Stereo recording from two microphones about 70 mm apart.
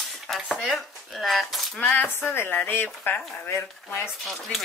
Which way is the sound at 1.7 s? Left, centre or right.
Left.